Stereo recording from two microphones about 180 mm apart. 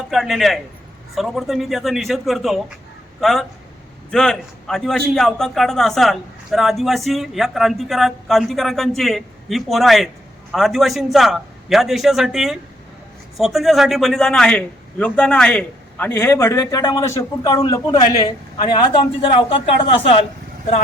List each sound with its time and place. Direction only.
0.1 s a man's voice: centre (ahead or behind); by 20.1 s 30° left (ahead or behind)